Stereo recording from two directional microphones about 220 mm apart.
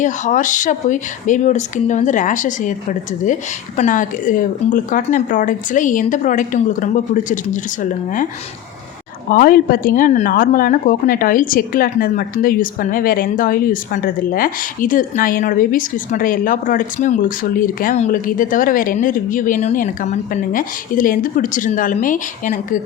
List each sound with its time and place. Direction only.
0.0 s speech: 35° left (ahead or behind)
3.8 s speech: 35° left (ahead or behind)
9.3 s speech: 40° left (ahead or behind)